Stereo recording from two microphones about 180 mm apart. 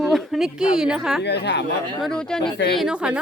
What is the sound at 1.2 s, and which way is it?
Speech, 70° left (ahead or behind).